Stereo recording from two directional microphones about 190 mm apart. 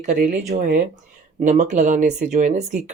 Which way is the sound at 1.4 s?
40° right (ahead or behind).